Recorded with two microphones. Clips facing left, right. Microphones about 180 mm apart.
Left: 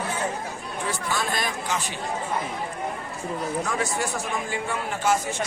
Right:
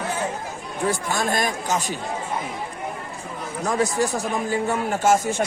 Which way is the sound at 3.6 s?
40° right (ahead or behind).